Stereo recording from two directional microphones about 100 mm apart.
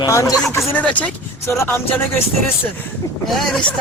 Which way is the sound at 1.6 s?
25° left (ahead or behind).